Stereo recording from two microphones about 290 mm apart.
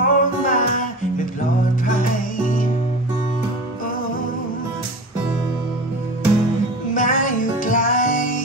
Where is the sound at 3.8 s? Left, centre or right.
Left.